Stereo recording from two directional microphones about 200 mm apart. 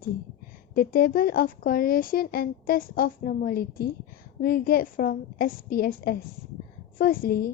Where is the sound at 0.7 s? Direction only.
45° left (ahead or behind).